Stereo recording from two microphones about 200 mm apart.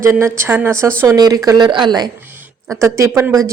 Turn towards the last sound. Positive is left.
turn(degrees=-15)  # may be behind; listen again after turning